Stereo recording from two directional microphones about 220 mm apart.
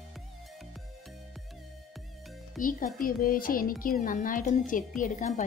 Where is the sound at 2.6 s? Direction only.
40° left (ahead or behind).